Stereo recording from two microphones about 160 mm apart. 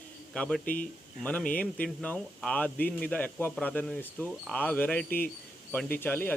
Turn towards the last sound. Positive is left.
turn(degrees=10)  # may be behind; listen again after turning